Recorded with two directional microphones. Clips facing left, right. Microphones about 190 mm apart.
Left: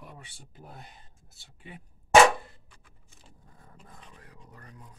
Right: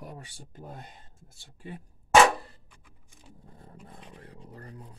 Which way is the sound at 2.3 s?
35° right (ahead or behind).